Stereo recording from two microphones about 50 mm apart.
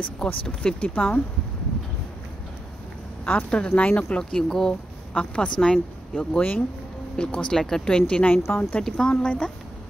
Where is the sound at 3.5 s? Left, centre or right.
Centre.